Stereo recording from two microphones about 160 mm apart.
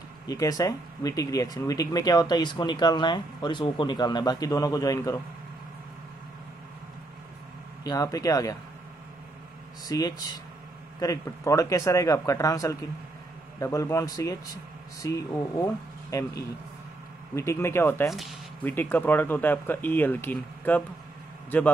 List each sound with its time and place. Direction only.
0.3 s speech: 25° left (ahead or behind)
7.8 s speech: 20° left (ahead or behind)
9.8 s a man's voice: 25° left (ahead or behind)